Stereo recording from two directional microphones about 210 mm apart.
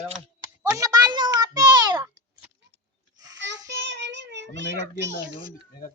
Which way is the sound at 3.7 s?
55° right (ahead or behind).